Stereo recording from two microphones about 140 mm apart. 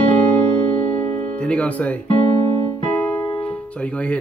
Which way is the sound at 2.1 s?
35° left (ahead or behind).